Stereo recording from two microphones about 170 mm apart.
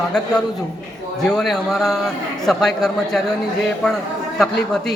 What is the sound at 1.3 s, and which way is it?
A man's voice, centre (ahead or behind).